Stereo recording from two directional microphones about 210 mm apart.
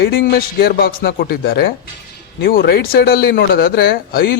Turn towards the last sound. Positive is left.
turn(degrees=45)  # may be behind; listen again after turning